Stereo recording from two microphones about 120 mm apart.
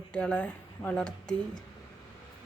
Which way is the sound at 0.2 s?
10° left (ahead or behind).